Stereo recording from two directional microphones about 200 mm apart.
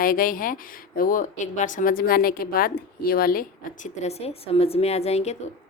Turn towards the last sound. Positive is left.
turn(degrees=30)  # may be behind; listen again after turning